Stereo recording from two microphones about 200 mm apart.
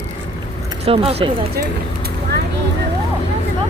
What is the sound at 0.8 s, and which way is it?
Speech, 30° right (ahead or behind).